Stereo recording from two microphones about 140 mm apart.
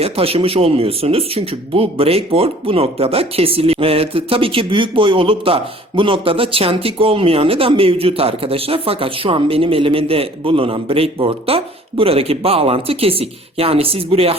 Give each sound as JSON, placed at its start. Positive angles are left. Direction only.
{"t": 0.0, "sound": "speech", "side_deg": -45}